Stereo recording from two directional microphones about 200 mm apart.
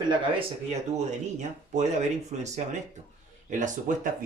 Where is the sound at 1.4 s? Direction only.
35° right (ahead or behind).